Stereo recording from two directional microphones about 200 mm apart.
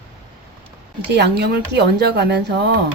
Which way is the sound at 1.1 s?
55° right (ahead or behind).